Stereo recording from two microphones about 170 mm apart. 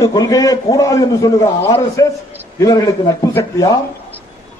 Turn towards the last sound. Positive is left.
turn(degrees=20)  # may be behind; listen again after turning